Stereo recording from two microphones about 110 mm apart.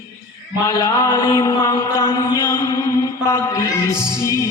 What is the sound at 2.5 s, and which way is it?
Music, 25° left (ahead or behind).